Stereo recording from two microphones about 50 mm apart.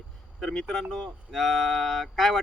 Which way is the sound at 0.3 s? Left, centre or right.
Centre.